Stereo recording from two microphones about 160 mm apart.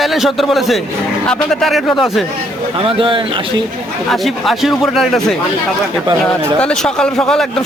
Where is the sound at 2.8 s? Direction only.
35° right (ahead or behind).